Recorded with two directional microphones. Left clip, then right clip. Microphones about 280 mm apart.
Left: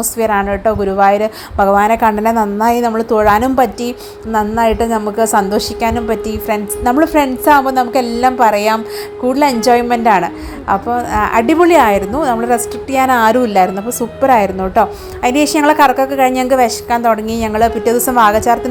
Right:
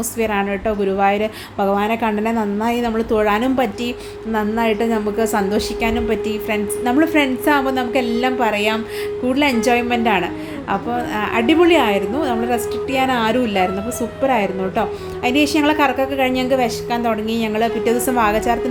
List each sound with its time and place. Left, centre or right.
0.2 s a woman's voice: centre